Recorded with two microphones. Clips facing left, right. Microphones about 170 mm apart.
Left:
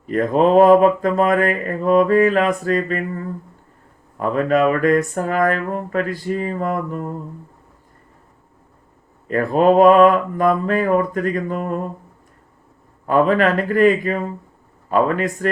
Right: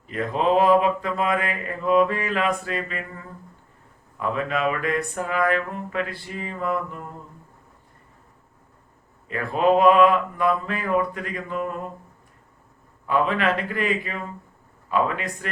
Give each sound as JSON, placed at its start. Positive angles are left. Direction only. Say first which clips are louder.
{"t": 0.0, "sound": "mantra", "louder": "left 8 dB", "side_deg": 45}
{"t": 9.3, "sound": "mantra", "louder": "left 6 dB", "side_deg": 45}
{"t": 13.1, "sound": "mantra", "louder": "left 7 dB", "side_deg": 45}